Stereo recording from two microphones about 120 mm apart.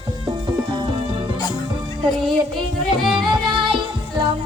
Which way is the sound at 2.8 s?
Centre (ahead or behind).